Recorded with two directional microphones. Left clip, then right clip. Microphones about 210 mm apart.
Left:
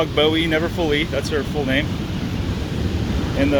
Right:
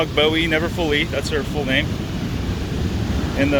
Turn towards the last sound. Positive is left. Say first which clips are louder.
# even
turn(degrees=10)  # may be behind; listen again after turning